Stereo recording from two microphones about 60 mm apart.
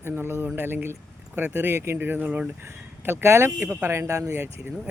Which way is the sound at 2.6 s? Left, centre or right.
Right.